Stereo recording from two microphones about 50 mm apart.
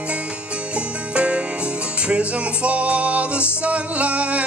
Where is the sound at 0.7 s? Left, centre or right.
Right.